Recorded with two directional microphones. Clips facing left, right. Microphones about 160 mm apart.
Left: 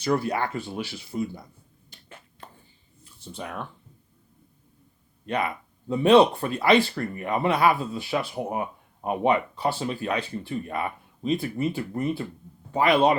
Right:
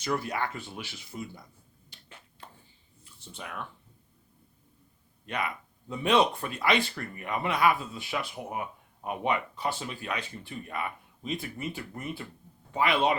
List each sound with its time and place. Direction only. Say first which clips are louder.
0.0 s speech: left 6 dB; 35° left (ahead or behind)
1.9 s finger snapping: left 5 dB; 50° left (ahead or behind)
3.3 s speech: left 5 dB; 35° left (ahead or behind)
5.2 s speech: left 6 dB; 35° left (ahead or behind)